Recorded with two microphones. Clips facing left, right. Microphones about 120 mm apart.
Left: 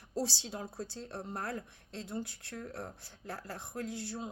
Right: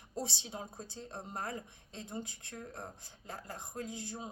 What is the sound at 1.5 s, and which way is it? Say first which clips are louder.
Speech: left 2 dB; 70° left (ahead or behind).